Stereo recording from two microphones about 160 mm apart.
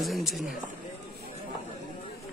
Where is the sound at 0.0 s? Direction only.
Centre (ahead or behind).